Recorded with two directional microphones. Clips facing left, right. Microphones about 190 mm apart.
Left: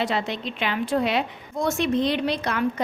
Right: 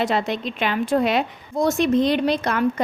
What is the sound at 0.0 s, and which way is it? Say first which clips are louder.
A woman's voice: right 4 dB; 45° right (ahead or behind).